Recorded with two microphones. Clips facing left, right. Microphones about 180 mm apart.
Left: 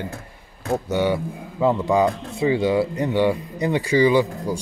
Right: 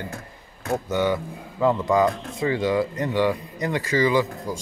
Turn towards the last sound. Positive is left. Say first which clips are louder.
# left 3 dB
turn(degrees=15)  # may be behind; listen again after turning